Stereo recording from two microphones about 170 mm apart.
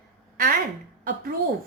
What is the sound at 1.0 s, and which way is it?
Speech, 60° right (ahead or behind).